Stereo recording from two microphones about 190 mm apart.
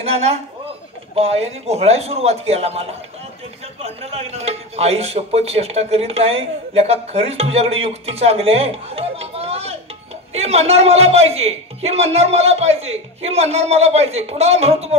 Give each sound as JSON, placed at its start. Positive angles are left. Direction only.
{"t": 0.0, "sound": "a man's voice", "side_deg": -30}